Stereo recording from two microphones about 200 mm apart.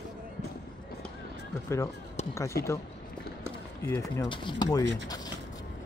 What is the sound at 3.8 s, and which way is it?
Speech, 15° left (ahead or behind).